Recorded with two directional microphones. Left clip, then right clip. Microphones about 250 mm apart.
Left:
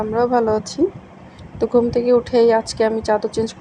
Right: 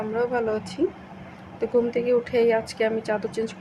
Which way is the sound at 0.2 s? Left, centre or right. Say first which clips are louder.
Left 8 dB; centre.